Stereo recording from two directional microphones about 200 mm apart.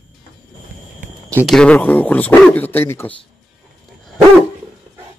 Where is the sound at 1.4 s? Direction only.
5° left (ahead or behind).